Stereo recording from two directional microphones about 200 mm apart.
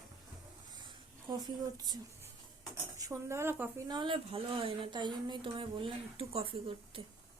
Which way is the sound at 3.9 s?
25° right (ahead or behind).